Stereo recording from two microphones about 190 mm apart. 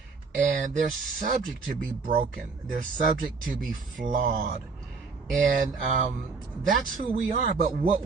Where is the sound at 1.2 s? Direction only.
45° right (ahead or behind).